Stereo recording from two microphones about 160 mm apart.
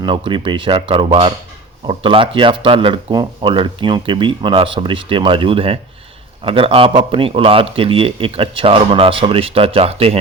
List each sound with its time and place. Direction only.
0.0 s speech: 30° right (ahead or behind)